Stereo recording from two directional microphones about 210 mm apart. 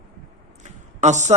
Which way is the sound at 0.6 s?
35° right (ahead or behind).